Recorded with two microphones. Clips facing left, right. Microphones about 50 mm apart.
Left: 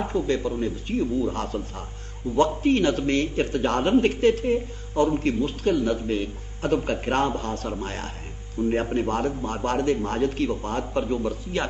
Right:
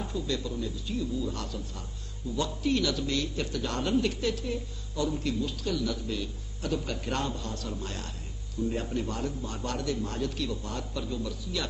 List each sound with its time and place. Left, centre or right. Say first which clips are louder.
0.0 s a man's voice: left 8 dB; left